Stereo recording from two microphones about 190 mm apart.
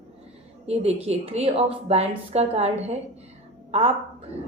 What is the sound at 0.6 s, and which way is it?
A woman's voice, 35° right (ahead or behind).